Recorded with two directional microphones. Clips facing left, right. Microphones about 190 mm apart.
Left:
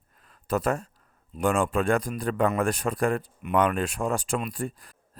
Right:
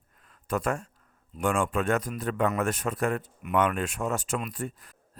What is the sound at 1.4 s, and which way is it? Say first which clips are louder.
Speech: left 3 dB; 35° left (ahead or behind).